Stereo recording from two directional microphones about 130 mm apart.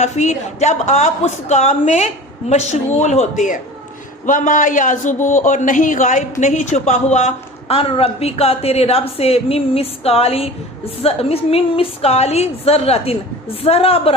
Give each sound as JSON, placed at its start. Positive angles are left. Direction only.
{"t": 0.0, "sound": "a woman's voice", "side_deg": 65}